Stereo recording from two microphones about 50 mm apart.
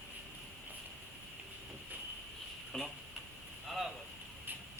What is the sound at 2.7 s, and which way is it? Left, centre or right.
Speech, centre.